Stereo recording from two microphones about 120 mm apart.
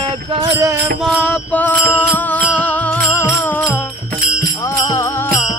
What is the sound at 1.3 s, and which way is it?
Music, 15° left (ahead or behind).